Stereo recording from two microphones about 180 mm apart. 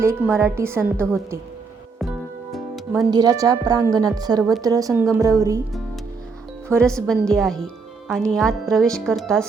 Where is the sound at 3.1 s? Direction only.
20° right (ahead or behind).